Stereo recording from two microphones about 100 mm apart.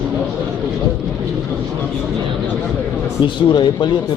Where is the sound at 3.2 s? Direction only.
50° left (ahead or behind).